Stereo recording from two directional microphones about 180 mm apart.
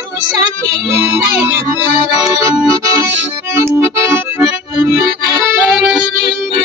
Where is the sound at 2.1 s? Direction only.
20° right (ahead or behind).